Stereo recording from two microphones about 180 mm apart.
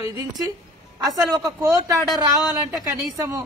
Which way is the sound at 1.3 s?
20° right (ahead or behind).